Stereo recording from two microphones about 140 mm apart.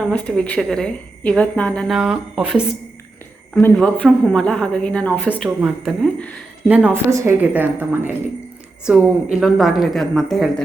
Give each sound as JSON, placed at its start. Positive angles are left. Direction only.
{"t": 0.1, "sound": "speech", "side_deg": 10}
{"t": 1.9, "sound": "a woman's voice", "side_deg": -5}
{"t": 3.5, "sound": "speech", "side_deg": 10}
{"t": 5.5, "sound": "a woman's voice", "side_deg": -5}
{"t": 6.1, "sound": "speech", "side_deg": 10}
{"t": 6.7, "sound": "a woman's voice", "side_deg": -10}
{"t": 7.1, "sound": "a woman's voice", "side_deg": -20}